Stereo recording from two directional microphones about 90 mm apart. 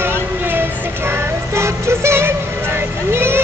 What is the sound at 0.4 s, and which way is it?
Music, 25° right (ahead or behind).